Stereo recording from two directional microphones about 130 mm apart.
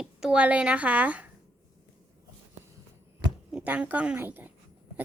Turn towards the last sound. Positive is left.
turn(degrees=-15)  # may be behind; listen again after turning